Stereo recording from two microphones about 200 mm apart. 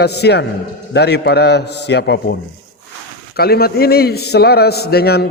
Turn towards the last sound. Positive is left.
turn(degrees=50)  # may be behind; listen again after turning